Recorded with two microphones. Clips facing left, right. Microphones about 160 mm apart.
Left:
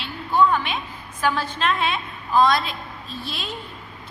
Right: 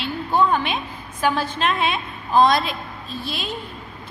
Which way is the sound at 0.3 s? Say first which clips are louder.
Even; 25° right (ahead or behind).